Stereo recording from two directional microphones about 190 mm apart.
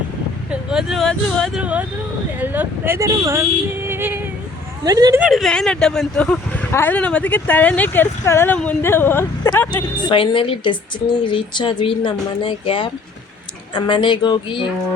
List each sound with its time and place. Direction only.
0.5 s speech: 5° right (ahead or behind)
1.6 s speech: 5° right (ahead or behind)
5.2 s speech: centre (ahead or behind)
10.0 s speech: 25° left (ahead or behind)